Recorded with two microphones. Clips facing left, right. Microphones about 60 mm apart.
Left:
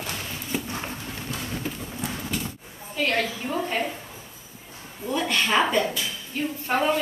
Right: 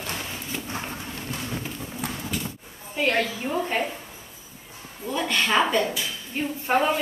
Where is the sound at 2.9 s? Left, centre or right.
Right.